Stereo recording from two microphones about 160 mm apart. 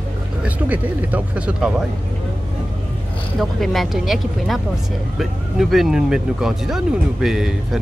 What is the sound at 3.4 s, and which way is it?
Speech, centre (ahead or behind).